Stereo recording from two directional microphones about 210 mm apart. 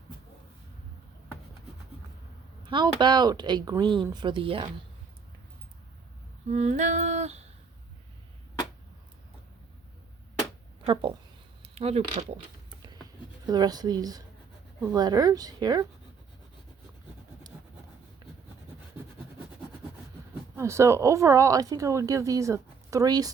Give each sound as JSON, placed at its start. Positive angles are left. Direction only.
{"t": 2.6, "sound": "speech", "side_deg": -20}
{"t": 6.5, "sound": "a sound", "side_deg": -35}
{"t": 11.6, "sound": "speech", "side_deg": -30}
{"t": 13.5, "sound": "speech", "side_deg": -20}
{"t": 20.6, "sound": "speech", "side_deg": -15}